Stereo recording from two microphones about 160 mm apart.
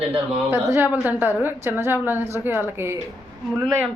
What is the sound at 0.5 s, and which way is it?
A woman's voice, 15° right (ahead or behind).